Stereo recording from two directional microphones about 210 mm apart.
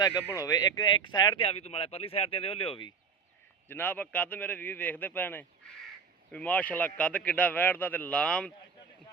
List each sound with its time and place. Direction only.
0.3 s speech: 15° left (ahead or behind)
3.7 s speech: 10° left (ahead or behind)